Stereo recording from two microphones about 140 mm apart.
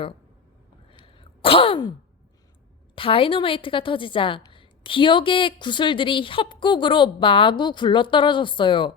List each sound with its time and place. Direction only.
0.9 s sneeze: 40° left (ahead or behind)
2.9 s a woman's voice: 40° left (ahead or behind)